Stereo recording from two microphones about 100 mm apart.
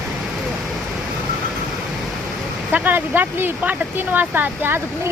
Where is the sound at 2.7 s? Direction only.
20° right (ahead or behind).